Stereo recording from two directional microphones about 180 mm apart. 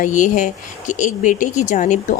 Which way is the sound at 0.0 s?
45° left (ahead or behind).